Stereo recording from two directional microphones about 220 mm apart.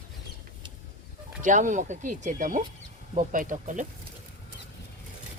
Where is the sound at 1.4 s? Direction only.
35° right (ahead or behind).